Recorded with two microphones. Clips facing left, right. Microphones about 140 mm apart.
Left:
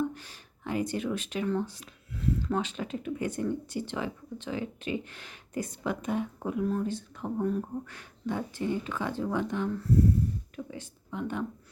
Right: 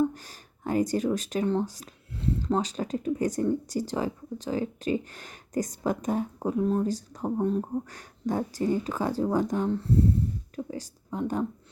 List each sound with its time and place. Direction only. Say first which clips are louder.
0.1 s speech: right 1 dB; 40° right (ahead or behind)
2.1 s speech: right 2 dB; 30° right (ahead or behind)
7.9 s speech: right 4 dB; 40° right (ahead or behind)
9.6 s speech: right 1 dB; 30° right (ahead or behind)
10.5 s a sound: right 5 dB; 35° right (ahead or behind)